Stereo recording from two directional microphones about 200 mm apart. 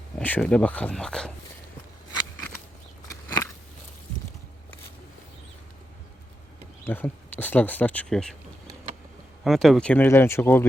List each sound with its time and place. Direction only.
0.2 s speech: 10° left (ahead or behind)
3.1 s a sound: 15° left (ahead or behind)
6.8 s speech: 10° left (ahead or behind)